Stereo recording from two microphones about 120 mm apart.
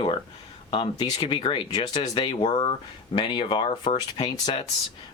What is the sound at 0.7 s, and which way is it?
Speech, 40° left (ahead or behind).